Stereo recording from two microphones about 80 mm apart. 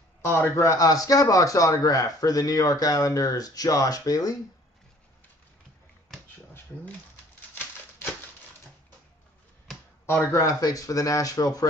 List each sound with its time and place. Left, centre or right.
0.2 s a man's voice: left
0.7 s speech: left
10.3 s speech: left